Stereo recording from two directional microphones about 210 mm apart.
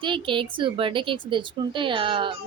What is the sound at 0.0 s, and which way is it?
A woman's voice, 25° right (ahead or behind).